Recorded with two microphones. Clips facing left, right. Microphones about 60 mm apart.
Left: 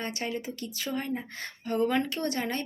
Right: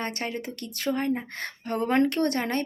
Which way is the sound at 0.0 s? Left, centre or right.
Right.